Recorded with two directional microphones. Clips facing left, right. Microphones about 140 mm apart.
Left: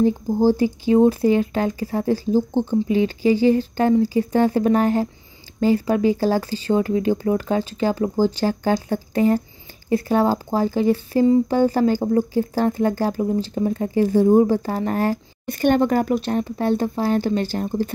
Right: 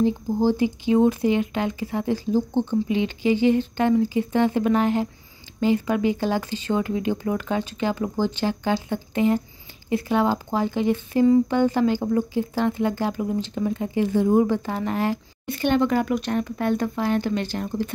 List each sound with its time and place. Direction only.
0.5 s speech: 40° left (ahead or behind)